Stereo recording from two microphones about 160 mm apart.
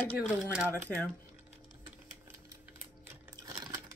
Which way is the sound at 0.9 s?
5° right (ahead or behind).